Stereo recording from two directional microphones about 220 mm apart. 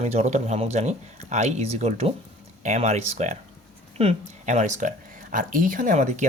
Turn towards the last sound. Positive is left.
turn(degrees=-35)  # may be behind; listen again after turning